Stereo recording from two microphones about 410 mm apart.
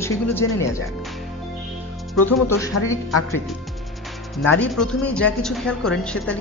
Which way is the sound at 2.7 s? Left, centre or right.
Left.